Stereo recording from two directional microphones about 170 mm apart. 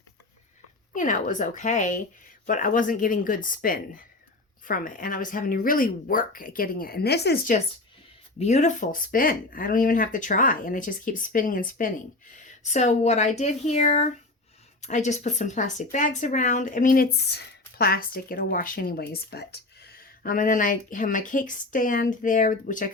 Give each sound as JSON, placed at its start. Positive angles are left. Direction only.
{"t": 0.9, "sound": "speech", "side_deg": 50}
{"t": 8.4, "sound": "speech", "side_deg": 40}